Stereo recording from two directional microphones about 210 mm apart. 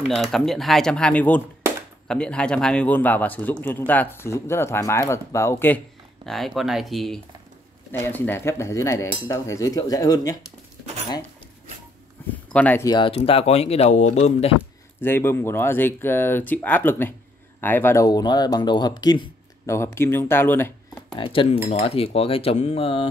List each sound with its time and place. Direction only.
0.1 s a man's voice: centre (ahead or behind)
6.2 s a man's voice: centre (ahead or behind); by 10.3 s 15° left (ahead or behind)
12.5 s speech: 10° left (ahead or behind); by 14.6 s 30° left (ahead or behind)
15.0 s a man's voice: 10° left (ahead or behind)
21.2 s speech: 25° left (ahead or behind)